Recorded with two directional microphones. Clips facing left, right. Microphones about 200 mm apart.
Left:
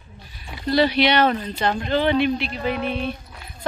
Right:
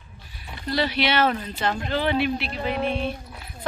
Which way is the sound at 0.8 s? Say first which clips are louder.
Left 2 dB; 5° right (ahead or behind).